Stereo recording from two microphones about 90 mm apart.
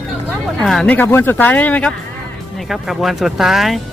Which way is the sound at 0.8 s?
20° left (ahead or behind).